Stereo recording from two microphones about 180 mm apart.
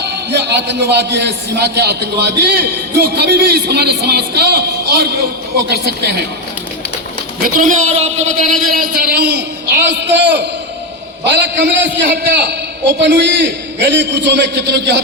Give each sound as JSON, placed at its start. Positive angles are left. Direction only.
{"t": 0.0, "sound": "a man's voice", "side_deg": -70}
{"t": 7.4, "sound": "speech", "side_deg": -45}
{"t": 8.6, "sound": "a man's voice", "side_deg": -55}
{"t": 9.8, "sound": "a man's voice", "side_deg": -75}